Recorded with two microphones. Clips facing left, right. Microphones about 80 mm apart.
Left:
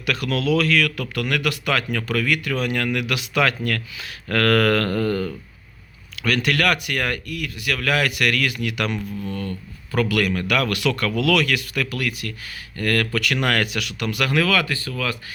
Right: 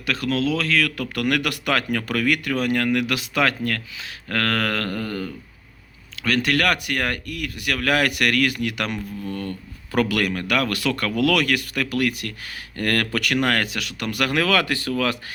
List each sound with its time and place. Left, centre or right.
0.0 s speech: right
3.9 s speech: right
6.1 s speech: right
9.9 s speech: right
13.3 s speech: right